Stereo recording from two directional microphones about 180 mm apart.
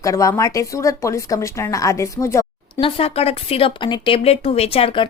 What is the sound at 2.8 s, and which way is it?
Speech, 30° left (ahead or behind).